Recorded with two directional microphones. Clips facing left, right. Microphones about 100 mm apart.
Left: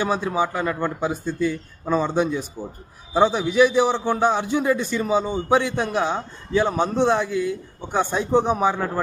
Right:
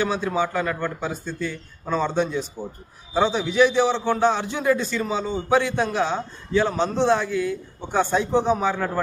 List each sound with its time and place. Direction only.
0.0 s a man's voice: 15° left (ahead or behind)